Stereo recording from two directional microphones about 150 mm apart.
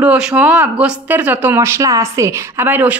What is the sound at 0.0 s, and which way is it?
Speech, 10° right (ahead or behind).